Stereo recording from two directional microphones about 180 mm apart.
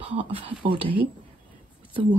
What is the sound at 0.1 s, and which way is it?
Speech, 35° right (ahead or behind).